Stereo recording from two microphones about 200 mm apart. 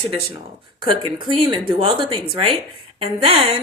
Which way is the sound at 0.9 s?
25° right (ahead or behind).